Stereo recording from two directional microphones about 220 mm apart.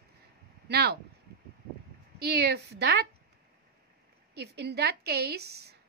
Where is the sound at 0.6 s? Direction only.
45° right (ahead or behind).